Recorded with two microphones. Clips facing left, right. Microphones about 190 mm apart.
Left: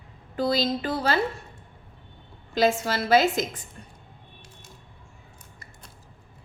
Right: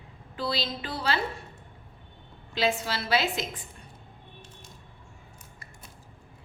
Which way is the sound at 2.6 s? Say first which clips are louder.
Left 5 dB; 45° left (ahead or behind).